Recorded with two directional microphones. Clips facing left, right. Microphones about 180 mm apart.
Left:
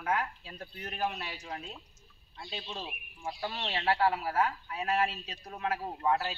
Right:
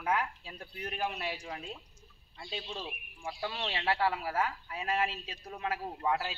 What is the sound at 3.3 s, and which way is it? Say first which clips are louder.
Speech: left 1 dB; 40° left (ahead or behind).